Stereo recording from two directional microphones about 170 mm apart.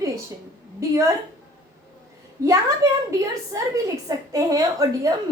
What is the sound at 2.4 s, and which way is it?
A woman's voice, 20° right (ahead or behind).